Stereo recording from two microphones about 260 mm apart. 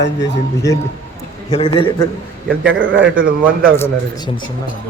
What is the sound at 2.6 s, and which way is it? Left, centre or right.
Speech, right.